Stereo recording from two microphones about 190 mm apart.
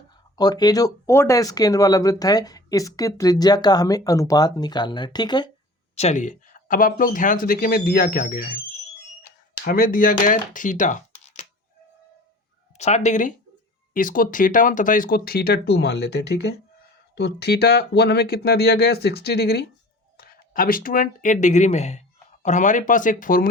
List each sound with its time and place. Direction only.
0.3 s speech: 20° left (ahead or behind)
6.0 s speech: 40° left (ahead or behind)
12.7 s speech: 35° left (ahead or behind)